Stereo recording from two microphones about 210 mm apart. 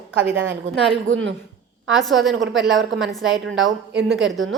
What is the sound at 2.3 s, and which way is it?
Speech, 60° right (ahead or behind).